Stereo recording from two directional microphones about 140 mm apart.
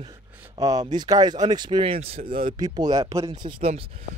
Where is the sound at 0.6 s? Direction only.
25° right (ahead or behind); by 2.3 s 45° right (ahead or behind).